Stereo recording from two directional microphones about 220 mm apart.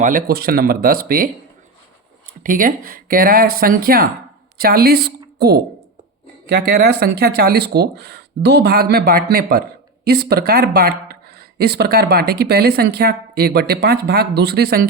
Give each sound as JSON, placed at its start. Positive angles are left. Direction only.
{"t": 0.0, "sound": "speech", "side_deg": -40}
{"t": 2.4, "sound": "a woman's voice", "side_deg": -40}